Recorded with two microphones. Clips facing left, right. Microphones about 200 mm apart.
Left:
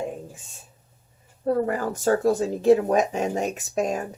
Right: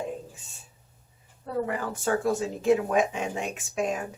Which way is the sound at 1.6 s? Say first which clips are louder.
Left 6 dB; 45° left (ahead or behind).